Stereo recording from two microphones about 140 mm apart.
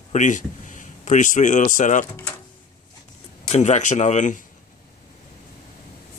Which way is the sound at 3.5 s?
55° left (ahead or behind).